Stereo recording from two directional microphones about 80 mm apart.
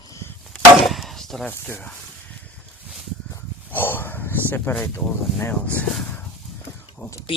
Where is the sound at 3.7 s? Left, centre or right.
Left.